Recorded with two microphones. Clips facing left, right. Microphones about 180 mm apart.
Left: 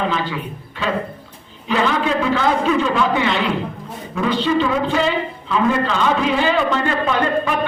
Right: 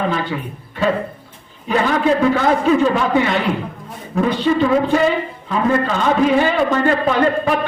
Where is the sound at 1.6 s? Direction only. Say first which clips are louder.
Right 2 dB; 45° right (ahead or behind).